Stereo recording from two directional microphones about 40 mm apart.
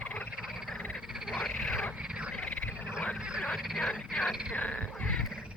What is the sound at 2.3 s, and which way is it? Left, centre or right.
Frog, left.